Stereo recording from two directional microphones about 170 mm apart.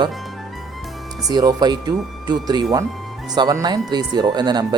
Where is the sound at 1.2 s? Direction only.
20° right (ahead or behind).